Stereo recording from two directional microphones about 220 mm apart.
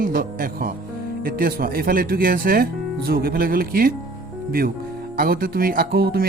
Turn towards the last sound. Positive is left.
turn(degrees=-45)  # may be behind; listen again after turning